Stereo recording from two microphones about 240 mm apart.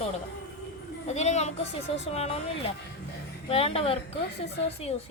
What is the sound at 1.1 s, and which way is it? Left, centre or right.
Speech, left.